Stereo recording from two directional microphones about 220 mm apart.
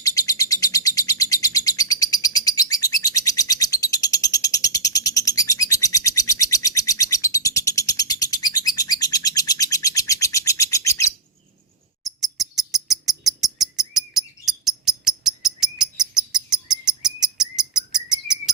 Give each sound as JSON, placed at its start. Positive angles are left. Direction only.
{"t": 0.0, "sound": "bird", "side_deg": 15}
{"t": 12.0, "sound": "bird", "side_deg": 0}